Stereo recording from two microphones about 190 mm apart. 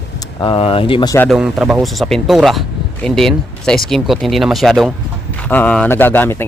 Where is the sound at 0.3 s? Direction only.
25° left (ahead or behind).